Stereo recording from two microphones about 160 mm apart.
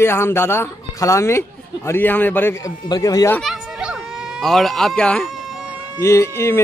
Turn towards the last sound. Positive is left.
turn(degrees=15)  # may be behind; listen again after turning